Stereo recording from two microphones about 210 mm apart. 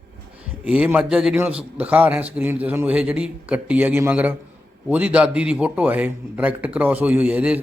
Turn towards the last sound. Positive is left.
turn(degrees=-5)  # may be behind; listen again after turning